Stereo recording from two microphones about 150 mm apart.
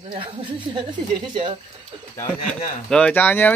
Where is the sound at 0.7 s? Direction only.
30° right (ahead or behind).